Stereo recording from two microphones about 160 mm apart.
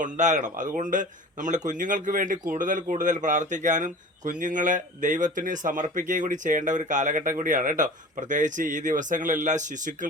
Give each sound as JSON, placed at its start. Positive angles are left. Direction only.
{"t": 0.0, "sound": "speech", "side_deg": -50}